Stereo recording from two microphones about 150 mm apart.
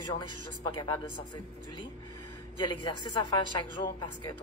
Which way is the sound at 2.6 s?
30° left (ahead or behind).